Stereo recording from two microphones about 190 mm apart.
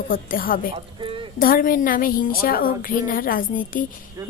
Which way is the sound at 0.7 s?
25° right (ahead or behind).